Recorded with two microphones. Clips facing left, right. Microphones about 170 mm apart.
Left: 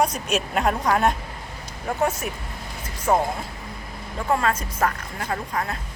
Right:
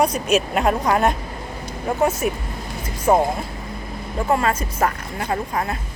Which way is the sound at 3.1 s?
20° right (ahead or behind).